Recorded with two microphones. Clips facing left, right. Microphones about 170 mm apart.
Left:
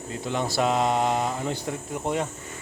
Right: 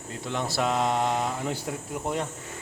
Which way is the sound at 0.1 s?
Centre (ahead or behind).